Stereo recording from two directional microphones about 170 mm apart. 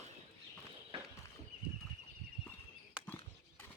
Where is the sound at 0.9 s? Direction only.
30° right (ahead or behind).